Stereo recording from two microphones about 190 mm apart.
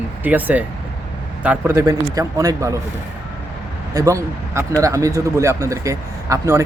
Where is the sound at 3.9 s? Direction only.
15° right (ahead or behind).